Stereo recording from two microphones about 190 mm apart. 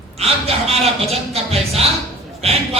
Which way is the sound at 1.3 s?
30° right (ahead or behind).